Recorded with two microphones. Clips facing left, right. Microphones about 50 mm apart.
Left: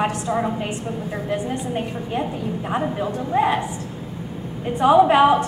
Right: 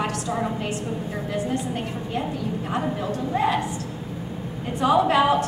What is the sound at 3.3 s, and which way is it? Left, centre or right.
Speech, left.